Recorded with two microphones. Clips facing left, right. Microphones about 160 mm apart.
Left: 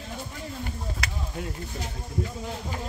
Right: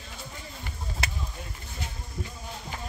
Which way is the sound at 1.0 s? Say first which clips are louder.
Right 3 dB; 25° right (ahead or behind).